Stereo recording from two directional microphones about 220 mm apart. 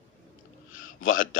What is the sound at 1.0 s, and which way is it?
Speech, 65° left (ahead or behind).